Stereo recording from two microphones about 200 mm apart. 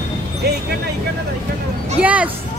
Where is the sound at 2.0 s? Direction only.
5° right (ahead or behind).